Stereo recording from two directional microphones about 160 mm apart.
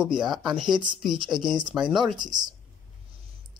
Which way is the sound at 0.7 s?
30° right (ahead or behind).